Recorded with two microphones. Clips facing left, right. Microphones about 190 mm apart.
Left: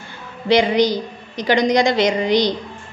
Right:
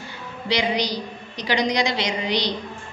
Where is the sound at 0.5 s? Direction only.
50° left (ahead or behind).